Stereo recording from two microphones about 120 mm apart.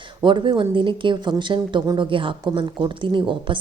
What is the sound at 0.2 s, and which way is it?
A woman's voice, 45° right (ahead or behind).